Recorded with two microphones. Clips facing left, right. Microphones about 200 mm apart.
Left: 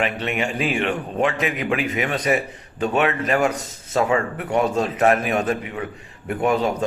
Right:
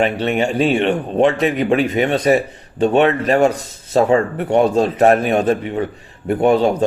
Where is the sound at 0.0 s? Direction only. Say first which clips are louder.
Right 7 dB; 30° right (ahead or behind).